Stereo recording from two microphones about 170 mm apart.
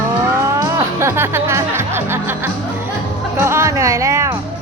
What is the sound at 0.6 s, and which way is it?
Speech, 15° right (ahead or behind).